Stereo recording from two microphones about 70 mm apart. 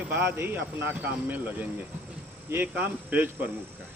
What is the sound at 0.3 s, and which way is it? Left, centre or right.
Speech, right.